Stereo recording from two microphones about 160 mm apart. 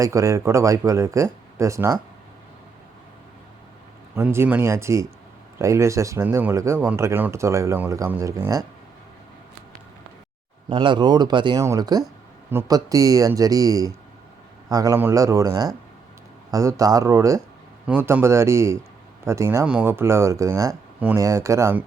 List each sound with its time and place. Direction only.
0.0 s speech: 20° right (ahead or behind)
4.1 s speech: 15° right (ahead or behind)
10.7 s speech: 30° right (ahead or behind); by 21.8 s 15° right (ahead or behind)